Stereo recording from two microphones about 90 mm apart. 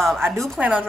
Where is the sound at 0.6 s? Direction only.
15° right (ahead or behind).